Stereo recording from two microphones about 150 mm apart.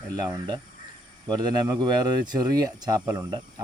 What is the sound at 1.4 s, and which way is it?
Speech, 25° right (ahead or behind).